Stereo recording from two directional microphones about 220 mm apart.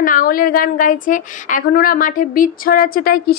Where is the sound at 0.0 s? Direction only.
40° left (ahead or behind).